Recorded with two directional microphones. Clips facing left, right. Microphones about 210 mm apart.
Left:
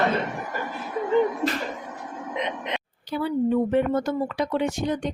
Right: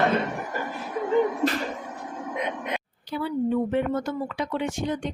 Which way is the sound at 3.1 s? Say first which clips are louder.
Left 2 dB; 50° left (ahead or behind).